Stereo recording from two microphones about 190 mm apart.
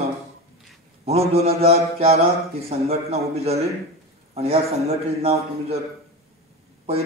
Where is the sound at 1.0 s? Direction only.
35° right (ahead or behind).